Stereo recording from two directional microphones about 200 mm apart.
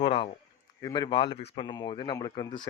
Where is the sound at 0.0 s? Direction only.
25° left (ahead or behind).